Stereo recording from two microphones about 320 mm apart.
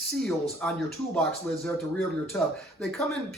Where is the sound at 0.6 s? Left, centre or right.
Centre.